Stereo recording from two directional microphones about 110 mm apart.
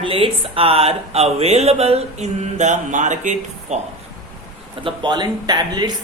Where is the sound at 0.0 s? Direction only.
55° right (ahead or behind); by 3.8 s 90° right.